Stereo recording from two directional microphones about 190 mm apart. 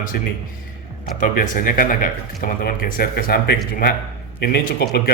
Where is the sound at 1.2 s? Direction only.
45° left (ahead or behind).